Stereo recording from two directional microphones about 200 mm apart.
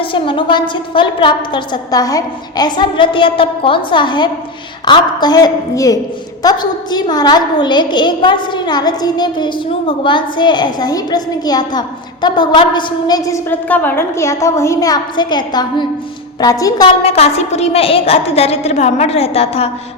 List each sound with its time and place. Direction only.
0.0 s a woman's voice: 25° left (ahead or behind)
17.0 s a woman's voice: 30° left (ahead or behind)